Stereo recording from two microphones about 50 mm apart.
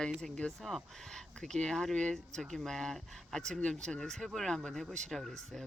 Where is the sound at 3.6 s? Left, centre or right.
Centre.